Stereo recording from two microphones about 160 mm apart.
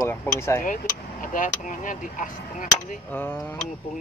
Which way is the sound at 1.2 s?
55° left (ahead or behind).